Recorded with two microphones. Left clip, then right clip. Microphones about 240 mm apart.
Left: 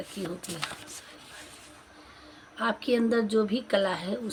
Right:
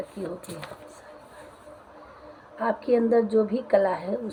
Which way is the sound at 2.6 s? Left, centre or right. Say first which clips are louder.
Right 4 dB; left.